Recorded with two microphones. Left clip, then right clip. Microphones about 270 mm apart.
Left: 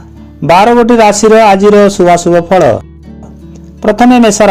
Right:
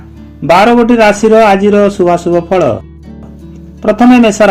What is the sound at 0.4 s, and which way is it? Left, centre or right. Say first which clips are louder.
A man's voice: left 1 dB; left.